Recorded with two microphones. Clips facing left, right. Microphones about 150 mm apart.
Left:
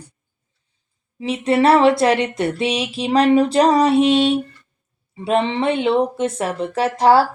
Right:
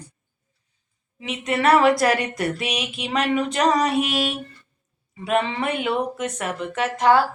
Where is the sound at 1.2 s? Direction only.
30° left (ahead or behind).